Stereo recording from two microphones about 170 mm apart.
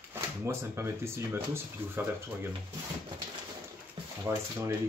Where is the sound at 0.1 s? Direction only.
15° right (ahead or behind).